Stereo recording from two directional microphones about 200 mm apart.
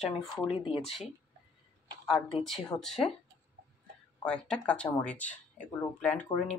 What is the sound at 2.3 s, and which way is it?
Speech, centre (ahead or behind).